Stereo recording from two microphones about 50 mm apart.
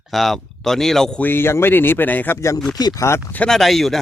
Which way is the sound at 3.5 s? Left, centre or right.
Centre.